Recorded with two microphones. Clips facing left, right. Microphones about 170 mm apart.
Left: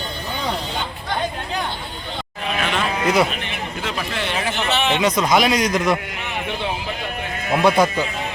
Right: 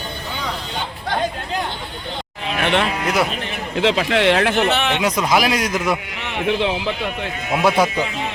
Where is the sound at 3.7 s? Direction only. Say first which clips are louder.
Right 12 dB; 80° right; by 5.0 s 55° right (ahead or behind).